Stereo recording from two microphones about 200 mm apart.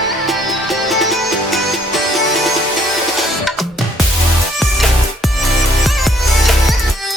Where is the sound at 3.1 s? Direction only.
Centre (ahead or behind).